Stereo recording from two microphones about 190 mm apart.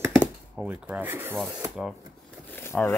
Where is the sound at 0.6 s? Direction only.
10° right (ahead or behind).